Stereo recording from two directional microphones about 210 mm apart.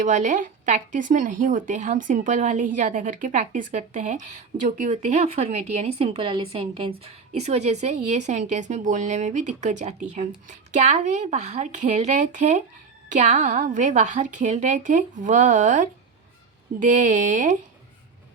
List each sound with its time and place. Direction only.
0.0 s speech: 35° right (ahead or behind)